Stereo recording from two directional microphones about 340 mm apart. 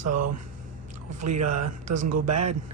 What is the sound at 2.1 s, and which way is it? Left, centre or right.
Speech, right.